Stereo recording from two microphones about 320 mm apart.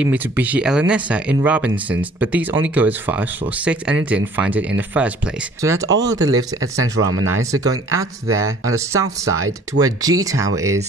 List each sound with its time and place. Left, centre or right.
0.0 s speech: centre